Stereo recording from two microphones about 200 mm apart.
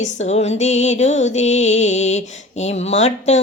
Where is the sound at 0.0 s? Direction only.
35° left (ahead or behind).